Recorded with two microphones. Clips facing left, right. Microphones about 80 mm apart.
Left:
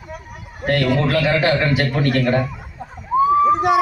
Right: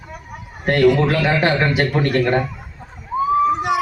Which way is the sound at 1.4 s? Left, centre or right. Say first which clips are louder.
Even; right.